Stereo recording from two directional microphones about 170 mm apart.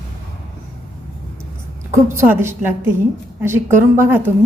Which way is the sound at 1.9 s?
15° right (ahead or behind).